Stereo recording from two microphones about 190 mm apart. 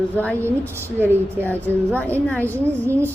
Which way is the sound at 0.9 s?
10° right (ahead or behind).